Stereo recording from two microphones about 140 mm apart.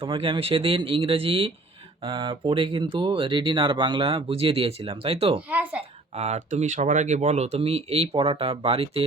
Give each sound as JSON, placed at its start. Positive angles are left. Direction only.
{"t": 0.0, "sound": "speech", "side_deg": -40}
{"t": 5.5, "sound": "a child's voice", "side_deg": -10}
{"t": 6.1, "sound": "speech", "side_deg": -50}